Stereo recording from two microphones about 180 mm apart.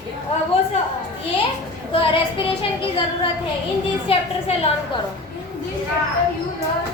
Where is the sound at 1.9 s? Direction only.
30° left (ahead or behind).